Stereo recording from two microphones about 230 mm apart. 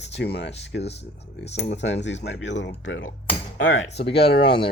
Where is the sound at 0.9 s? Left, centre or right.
Left.